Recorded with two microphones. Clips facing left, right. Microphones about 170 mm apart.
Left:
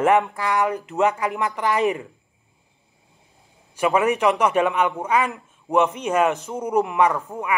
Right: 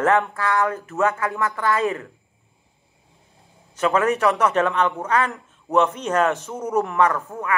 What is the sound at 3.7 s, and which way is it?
A man's voice, 10° left (ahead or behind).